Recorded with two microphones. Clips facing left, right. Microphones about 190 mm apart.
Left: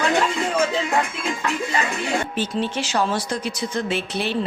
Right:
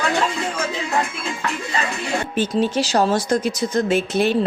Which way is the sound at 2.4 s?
40° right (ahead or behind).